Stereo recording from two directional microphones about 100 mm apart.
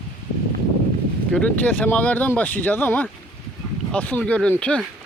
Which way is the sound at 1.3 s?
15° left (ahead or behind).